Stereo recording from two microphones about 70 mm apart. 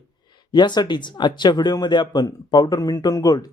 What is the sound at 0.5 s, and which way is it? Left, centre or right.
Speech, left.